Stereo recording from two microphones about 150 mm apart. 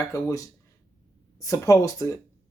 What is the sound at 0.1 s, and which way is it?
Speech, 20° left (ahead or behind).